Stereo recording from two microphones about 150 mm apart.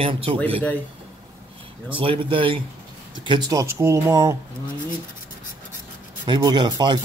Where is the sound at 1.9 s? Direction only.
35° right (ahead or behind).